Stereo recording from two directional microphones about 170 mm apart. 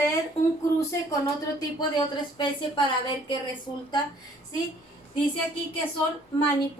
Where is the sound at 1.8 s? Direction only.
25° left (ahead or behind).